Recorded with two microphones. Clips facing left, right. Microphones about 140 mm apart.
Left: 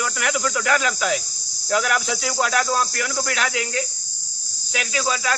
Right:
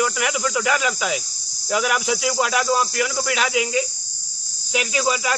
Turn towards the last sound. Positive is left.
turn(degrees=-15)  # may be behind; listen again after turning